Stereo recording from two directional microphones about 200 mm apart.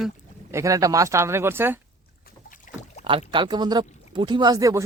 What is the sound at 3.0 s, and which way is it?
Speech, 25° right (ahead or behind).